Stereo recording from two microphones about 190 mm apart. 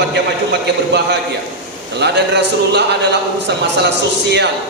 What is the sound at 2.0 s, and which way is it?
A man's voice, 60° right (ahead or behind).